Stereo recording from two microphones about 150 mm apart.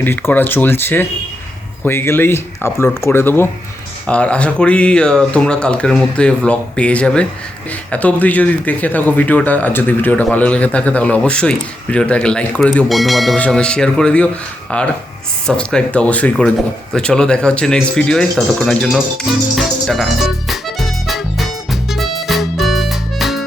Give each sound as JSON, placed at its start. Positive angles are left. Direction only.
{"t": 0.0, "sound": "speech", "side_deg": 15}
{"t": 16.9, "sound": "music", "side_deg": 5}